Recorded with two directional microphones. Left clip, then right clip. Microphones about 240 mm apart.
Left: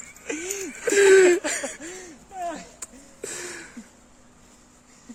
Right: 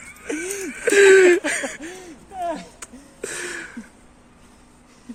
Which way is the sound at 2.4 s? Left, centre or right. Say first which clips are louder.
Right 5 dB; right.